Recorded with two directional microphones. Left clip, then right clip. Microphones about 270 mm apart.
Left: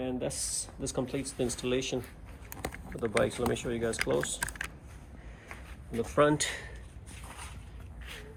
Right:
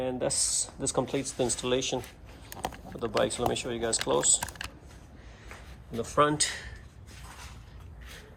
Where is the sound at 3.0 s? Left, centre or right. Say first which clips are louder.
Right 1 dB; centre.